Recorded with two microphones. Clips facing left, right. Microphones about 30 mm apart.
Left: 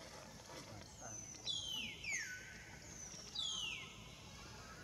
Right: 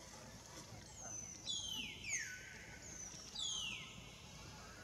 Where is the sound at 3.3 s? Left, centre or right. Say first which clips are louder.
Left 1 dB; centre.